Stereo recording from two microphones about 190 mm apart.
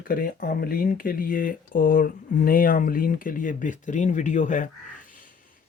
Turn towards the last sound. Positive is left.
turn(degrees=40)  # may be behind; listen again after turning